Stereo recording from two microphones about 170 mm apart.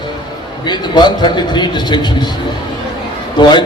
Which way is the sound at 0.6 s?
25° left (ahead or behind).